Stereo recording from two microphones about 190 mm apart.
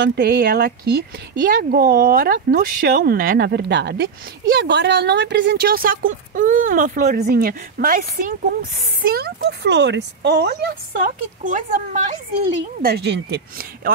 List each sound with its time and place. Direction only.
0.0 s a woman's voice: 55° right (ahead or behind)
12.8 s a woman's voice: 60° right (ahead or behind)